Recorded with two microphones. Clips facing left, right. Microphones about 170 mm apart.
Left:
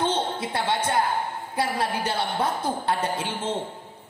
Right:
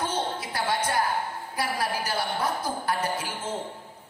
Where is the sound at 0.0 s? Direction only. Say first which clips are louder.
Left 4 dB; 25° left (ahead or behind).